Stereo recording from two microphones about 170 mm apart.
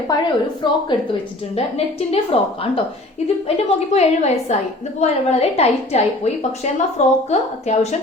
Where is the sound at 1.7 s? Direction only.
35° left (ahead or behind).